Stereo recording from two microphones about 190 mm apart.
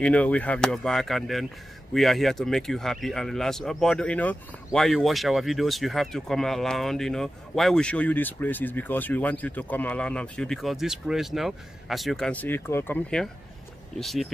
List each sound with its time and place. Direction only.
0.0 s speech: 5° left (ahead or behind)